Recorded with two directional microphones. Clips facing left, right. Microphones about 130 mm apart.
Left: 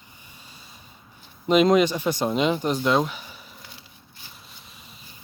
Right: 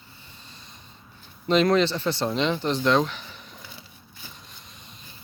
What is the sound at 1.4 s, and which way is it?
Speech, 10° left (ahead or behind).